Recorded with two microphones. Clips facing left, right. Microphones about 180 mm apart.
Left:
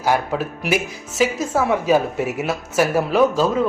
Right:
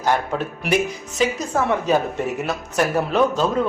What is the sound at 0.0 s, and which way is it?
A man's voice, 5° left (ahead or behind).